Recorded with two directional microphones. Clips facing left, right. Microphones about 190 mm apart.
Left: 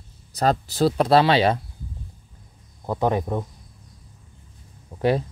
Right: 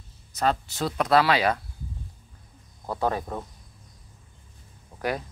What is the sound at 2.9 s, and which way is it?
Speech, 20° left (ahead or behind).